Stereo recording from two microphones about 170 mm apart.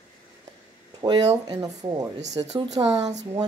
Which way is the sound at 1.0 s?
25° right (ahead or behind).